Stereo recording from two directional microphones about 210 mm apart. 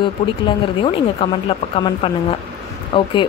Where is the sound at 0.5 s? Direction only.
25° left (ahead or behind).